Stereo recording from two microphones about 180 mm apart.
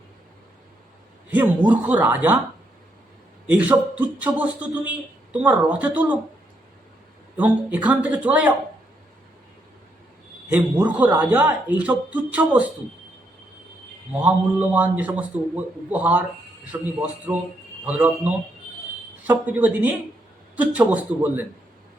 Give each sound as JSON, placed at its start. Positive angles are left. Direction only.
{"t": 1.3, "sound": "a man's voice", "side_deg": -10}
{"t": 3.5, "sound": "a man's voice", "side_deg": -10}
{"t": 7.3, "sound": "a man's voice", "side_deg": -10}
{"t": 10.5, "sound": "a man's voice", "side_deg": -10}
{"t": 14.1, "sound": "a man's voice", "side_deg": -10}